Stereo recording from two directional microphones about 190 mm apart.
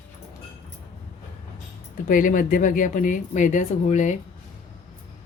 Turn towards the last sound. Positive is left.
turn(degrees=40)  # may be behind; listen again after turning